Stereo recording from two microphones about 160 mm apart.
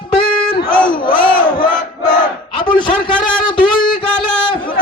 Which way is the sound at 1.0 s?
30° left (ahead or behind).